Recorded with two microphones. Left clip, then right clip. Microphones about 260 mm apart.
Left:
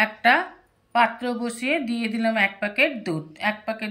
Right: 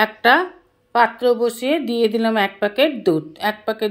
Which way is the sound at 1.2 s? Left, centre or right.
Centre.